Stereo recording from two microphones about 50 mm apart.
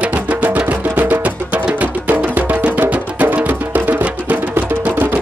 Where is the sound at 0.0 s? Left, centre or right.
Right.